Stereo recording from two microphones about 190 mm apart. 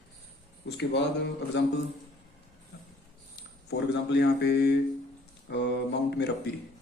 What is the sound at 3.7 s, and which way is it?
Mantra, 60° left (ahead or behind).